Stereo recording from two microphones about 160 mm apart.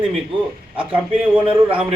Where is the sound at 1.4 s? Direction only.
30° right (ahead or behind).